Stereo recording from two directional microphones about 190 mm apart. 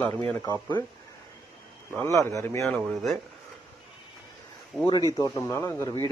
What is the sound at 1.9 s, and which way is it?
Speech, 15° right (ahead or behind).